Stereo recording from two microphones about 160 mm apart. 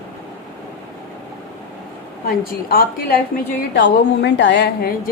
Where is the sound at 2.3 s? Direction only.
65° left (ahead or behind).